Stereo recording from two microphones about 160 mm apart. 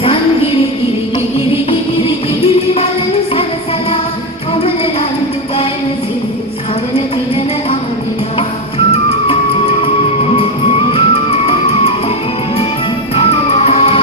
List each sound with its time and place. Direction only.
8.9 s music: 35° left (ahead or behind)
13.1 s music: 40° left (ahead or behind)